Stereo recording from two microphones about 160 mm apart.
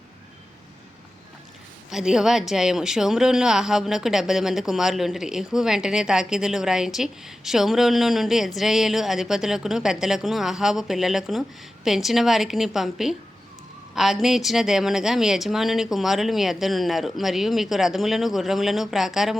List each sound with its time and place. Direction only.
1.9 s a woman's voice: 5° right (ahead or behind)